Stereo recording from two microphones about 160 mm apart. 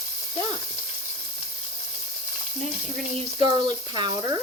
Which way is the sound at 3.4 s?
30° right (ahead or behind).